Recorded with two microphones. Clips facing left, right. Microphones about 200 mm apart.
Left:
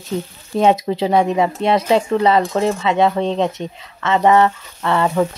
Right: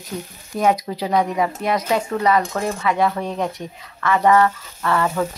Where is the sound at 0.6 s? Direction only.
25° left (ahead or behind).